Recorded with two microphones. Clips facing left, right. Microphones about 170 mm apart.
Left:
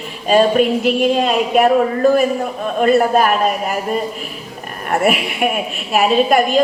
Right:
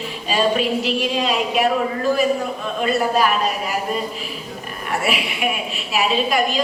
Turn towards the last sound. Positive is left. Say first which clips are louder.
# left 6 dB
turn(degrees=50)  # may be behind; listen again after turning